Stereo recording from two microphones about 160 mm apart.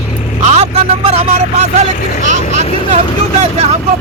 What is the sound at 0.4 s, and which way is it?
Music, 40° right (ahead or behind).